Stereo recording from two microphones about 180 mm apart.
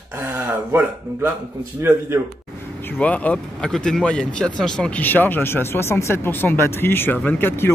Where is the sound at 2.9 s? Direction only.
10° left (ahead or behind).